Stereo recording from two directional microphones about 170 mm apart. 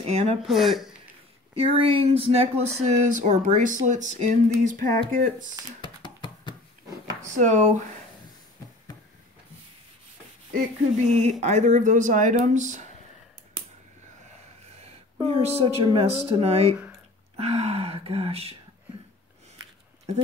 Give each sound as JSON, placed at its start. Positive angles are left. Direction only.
{"t": 0.0, "sound": "speech", "side_deg": -40}
{"t": 0.5, "sound": "speech", "side_deg": 0}
{"t": 1.8, "sound": "speech", "side_deg": -35}
{"t": 5.8, "sound": "a sound", "side_deg": 25}
{"t": 7.3, "sound": "speech", "side_deg": -45}
{"t": 10.5, "sound": "speech", "side_deg": -40}
{"t": 15.2, "sound": "speech", "side_deg": -35}
{"t": 17.4, "sound": "a sound", "side_deg": -35}